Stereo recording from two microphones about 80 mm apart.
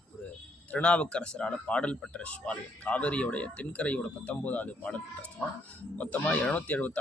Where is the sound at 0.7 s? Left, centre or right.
Centre.